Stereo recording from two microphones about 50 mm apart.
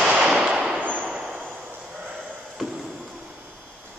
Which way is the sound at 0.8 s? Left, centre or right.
Right.